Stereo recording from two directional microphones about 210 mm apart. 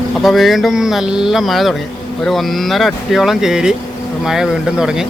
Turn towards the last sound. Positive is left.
turn(degrees=-5)  # may be behind; listen again after turning